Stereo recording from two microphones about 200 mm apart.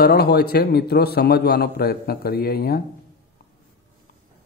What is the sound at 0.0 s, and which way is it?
Speech, 50° left (ahead or behind).